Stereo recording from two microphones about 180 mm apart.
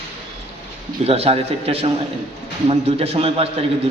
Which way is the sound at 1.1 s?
35° right (ahead or behind).